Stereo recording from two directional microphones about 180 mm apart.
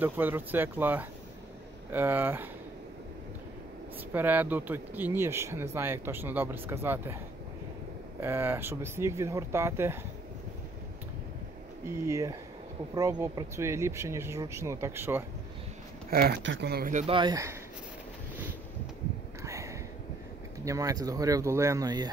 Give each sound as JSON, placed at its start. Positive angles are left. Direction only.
{"t": 0.0, "sound": "speech", "side_deg": -10}
{"t": 4.1, "sound": "speech", "side_deg": -10}
{"t": 8.2, "sound": "speech", "side_deg": -10}
{"t": 12.1, "sound": "speech", "side_deg": -20}
{"t": 16.1, "sound": "speech", "side_deg": -55}
{"t": 17.0, "sound": "speech", "side_deg": -25}
{"t": 19.4, "sound": "a sound", "side_deg": -15}
{"t": 20.6, "sound": "speech", "side_deg": -20}